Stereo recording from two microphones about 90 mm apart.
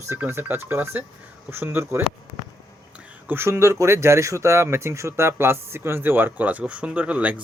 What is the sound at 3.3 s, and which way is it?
Speech, 30° right (ahead or behind).